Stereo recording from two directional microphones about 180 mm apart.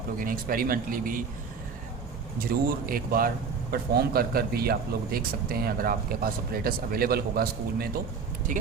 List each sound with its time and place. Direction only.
0.2 s speech: 50° right (ahead or behind)
2.5 s a man's voice: 55° right (ahead or behind)